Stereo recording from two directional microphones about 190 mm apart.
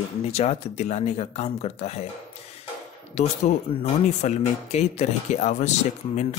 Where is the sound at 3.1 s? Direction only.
35° left (ahead or behind).